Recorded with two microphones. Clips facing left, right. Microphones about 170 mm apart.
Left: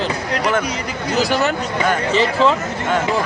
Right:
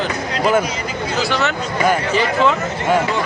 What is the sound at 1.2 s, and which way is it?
Speech, 40° left (ahead or behind).